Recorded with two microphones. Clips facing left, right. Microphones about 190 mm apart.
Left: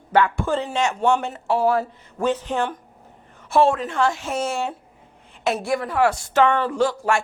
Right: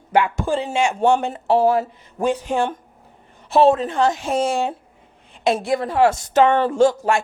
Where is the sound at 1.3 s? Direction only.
30° right (ahead or behind).